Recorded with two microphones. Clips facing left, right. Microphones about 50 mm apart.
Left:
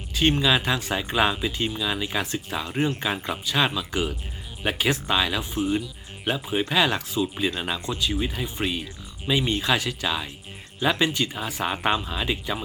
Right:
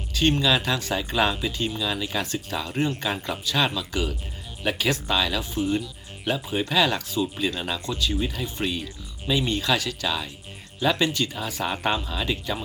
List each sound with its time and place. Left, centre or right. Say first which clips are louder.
0.2 s speech: even; centre